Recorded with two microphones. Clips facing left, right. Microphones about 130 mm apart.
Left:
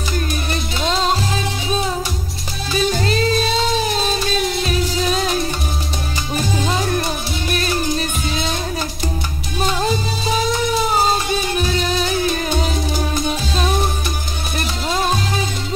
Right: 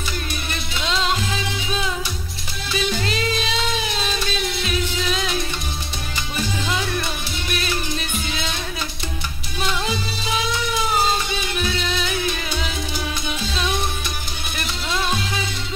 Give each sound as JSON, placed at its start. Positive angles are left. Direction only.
{"t": 0.5, "sound": "music", "side_deg": 40}
{"t": 9.6, "sound": "music", "side_deg": 40}
{"t": 14.9, "sound": "music", "side_deg": 40}